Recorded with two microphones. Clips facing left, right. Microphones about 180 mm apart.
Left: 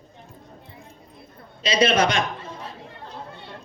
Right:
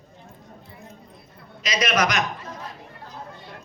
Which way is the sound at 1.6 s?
30° left (ahead or behind).